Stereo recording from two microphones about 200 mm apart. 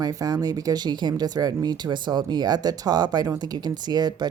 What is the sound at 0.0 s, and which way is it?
Speech, 20° right (ahead or behind).